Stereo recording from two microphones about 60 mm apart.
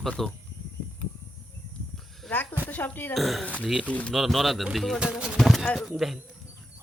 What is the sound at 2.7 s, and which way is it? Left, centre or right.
Speech, left.